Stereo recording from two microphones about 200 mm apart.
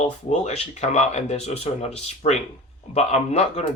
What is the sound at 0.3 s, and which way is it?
Speech, 35° left (ahead or behind).